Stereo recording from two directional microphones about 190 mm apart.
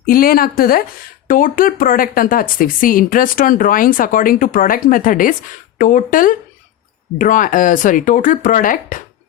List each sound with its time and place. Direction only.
0.0 s speech: 50° left (ahead or behind)